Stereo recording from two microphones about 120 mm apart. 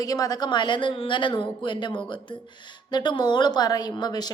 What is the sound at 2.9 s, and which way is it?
A woman's voice, 40° left (ahead or behind).